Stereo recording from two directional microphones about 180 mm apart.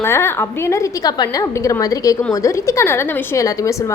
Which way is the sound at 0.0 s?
15° left (ahead or behind).